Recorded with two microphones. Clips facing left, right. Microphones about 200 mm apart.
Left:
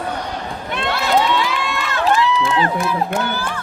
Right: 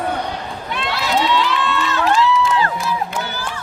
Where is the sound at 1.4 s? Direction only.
10° left (ahead or behind).